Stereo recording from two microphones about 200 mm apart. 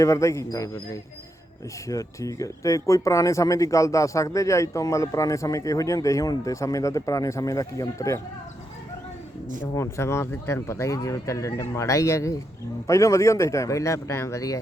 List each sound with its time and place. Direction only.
0.0 s speech: 15° left (ahead or behind)
1.9 s speech: 15° left (ahead or behind)
9.7 s speech: 15° left (ahead or behind)